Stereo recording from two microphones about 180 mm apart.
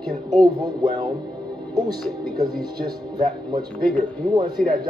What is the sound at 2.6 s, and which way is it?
Speech, 25° right (ahead or behind).